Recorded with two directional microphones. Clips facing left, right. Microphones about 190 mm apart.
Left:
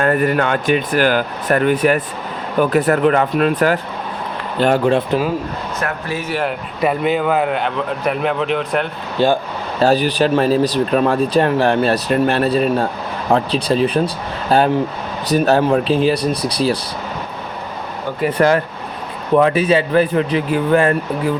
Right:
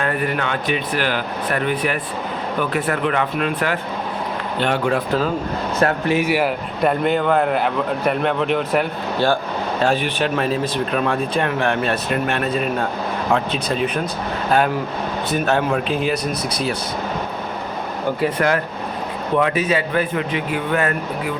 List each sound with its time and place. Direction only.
0.0 s speech: 45° left (ahead or behind)
4.9 s speech: 15° left (ahead or behind)
5.8 s speech: 20° right (ahead or behind)
6.8 s a man's voice: 5° left (ahead or behind)
9.1 s speech: 15° left (ahead or behind)
9.8 s speech: 35° left (ahead or behind)
18.3 s speech: 35° left (ahead or behind)